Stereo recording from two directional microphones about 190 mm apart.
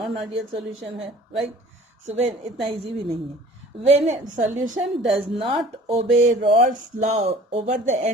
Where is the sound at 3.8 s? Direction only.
35° right (ahead or behind).